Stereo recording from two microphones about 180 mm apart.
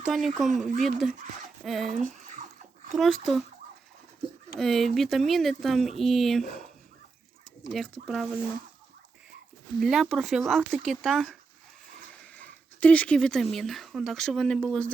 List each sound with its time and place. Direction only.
0.1 s speech: centre (ahead or behind)
2.0 s speech: 45° right (ahead or behind)
2.9 s speech: centre (ahead or behind)
4.6 s speech: centre (ahead or behind)
8.0 s speech: centre (ahead or behind)
9.8 s speech: centre (ahead or behind)